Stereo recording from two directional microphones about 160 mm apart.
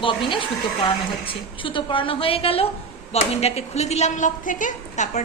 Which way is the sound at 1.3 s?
30° left (ahead or behind).